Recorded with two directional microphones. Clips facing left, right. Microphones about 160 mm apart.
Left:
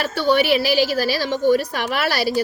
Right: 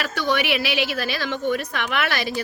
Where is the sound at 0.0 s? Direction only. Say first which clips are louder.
Left 5 dB; 30° left (ahead or behind).